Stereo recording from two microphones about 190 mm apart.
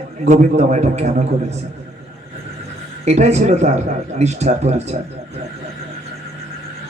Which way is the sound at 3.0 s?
35° right (ahead or behind).